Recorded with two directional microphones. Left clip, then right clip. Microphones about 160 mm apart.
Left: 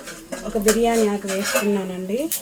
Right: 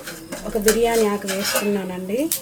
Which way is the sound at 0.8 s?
15° right (ahead or behind).